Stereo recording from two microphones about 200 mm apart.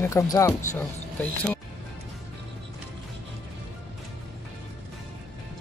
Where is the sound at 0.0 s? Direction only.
15° left (ahead or behind).